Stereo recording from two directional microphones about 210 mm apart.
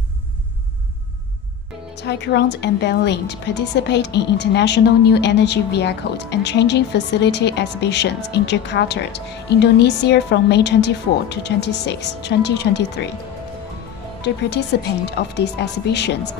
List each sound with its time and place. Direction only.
2.0 s a woman's voice: 55° left (ahead or behind)
14.2 s a woman's voice: 55° left (ahead or behind)